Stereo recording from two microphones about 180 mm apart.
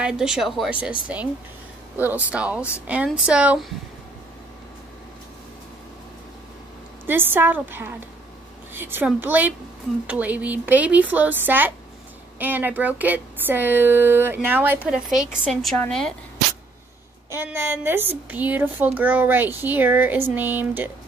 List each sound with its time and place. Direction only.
0.0 s a woman's voice: 5° right (ahead or behind)
7.1 s a woman's voice: 10° right (ahead or behind); by 16.1 s 5° left (ahead or behind)
17.3 s a woman's voice: 10° right (ahead or behind)